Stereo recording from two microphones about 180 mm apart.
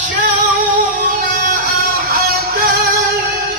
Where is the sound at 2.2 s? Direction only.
55° right (ahead or behind).